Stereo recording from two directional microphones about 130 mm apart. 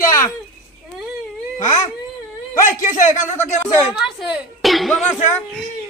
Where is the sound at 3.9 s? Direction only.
5° right (ahead or behind).